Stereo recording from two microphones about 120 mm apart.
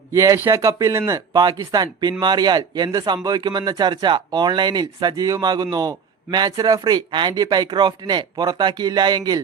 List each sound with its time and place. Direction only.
0.1 s speech: 25° right (ahead or behind)